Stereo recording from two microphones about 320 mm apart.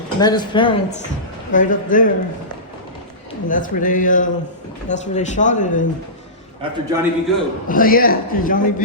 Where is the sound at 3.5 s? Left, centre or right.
Left.